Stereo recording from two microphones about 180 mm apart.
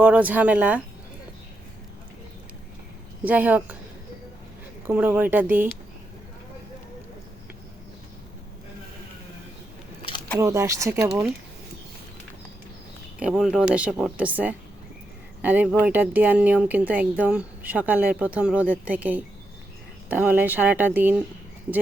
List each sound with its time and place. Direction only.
0.0 s speech: 10° right (ahead or behind)
3.2 s speech: 10° right (ahead or behind)
4.9 s speech: 10° right (ahead or behind)
10.3 s speech: 15° right (ahead or behind)
13.1 s speech: 5° right (ahead or behind)